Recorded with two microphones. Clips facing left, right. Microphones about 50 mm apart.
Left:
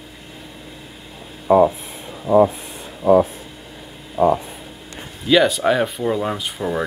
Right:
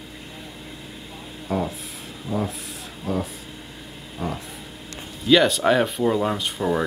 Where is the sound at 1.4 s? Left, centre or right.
Left.